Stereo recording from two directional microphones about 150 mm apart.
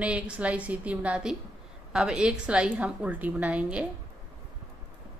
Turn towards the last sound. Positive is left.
turn(degrees=-10)  # may be behind; listen again after turning